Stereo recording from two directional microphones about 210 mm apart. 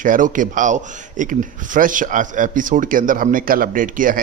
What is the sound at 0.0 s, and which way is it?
Speech, 40° right (ahead or behind).